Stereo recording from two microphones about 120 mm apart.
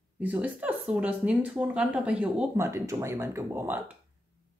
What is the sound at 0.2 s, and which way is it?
Speech, 10° right (ahead or behind).